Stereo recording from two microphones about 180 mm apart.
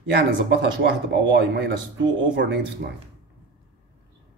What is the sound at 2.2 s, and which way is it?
Speech, 75° right (ahead or behind).